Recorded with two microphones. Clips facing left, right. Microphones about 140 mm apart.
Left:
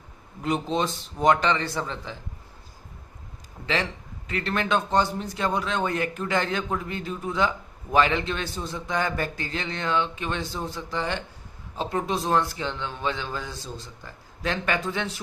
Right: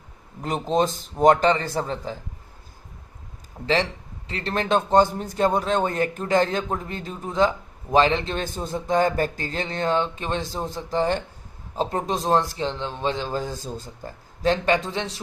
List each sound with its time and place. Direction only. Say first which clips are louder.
0.4 s speech: right 3 dB; 45° right (ahead or behind)
4.3 s a man's voice: right 1 dB; 30° right (ahead or behind)
4.7 s a man's voice: right 6 dB; 45° right (ahead or behind); by 15.1 s 30° right (ahead or behind)